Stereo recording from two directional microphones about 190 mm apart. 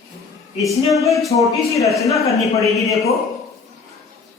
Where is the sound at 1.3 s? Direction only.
15° left (ahead or behind).